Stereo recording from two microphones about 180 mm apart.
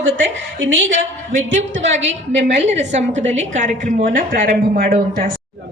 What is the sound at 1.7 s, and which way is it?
A woman's voice, 40° right (ahead or behind).